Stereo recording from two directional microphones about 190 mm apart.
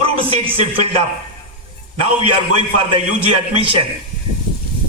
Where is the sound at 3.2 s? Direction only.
30° right (ahead or behind).